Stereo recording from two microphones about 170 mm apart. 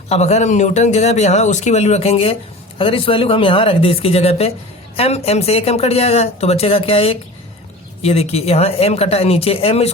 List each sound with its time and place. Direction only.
0.1 s speech: 40° left (ahead or behind)